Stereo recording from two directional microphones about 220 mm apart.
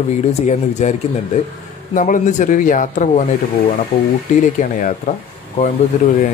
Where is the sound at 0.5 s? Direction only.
30° left (ahead or behind).